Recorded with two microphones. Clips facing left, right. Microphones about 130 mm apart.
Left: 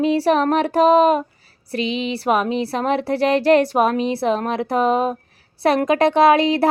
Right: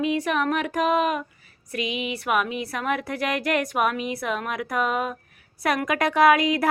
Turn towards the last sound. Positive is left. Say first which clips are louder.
# left 4 dB
turn(degrees=30)  # may be behind; listen again after turning